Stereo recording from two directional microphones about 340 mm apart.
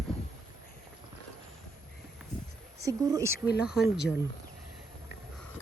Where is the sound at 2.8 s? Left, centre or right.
Centre.